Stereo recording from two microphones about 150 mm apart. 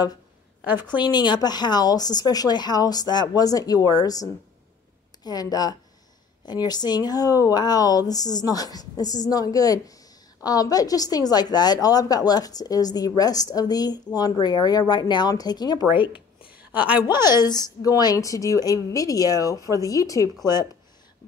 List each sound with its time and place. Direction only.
0.7 s a woman's voice: 15° right (ahead or behind)
0.9 s a woman's voice: 30° left (ahead or behind)
16.7 s a woman's voice: 10° right (ahead or behind)
17.4 s a woman's voice: 25° left (ahead or behind)